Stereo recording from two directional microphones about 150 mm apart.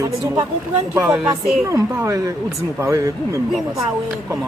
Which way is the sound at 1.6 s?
20° right (ahead or behind).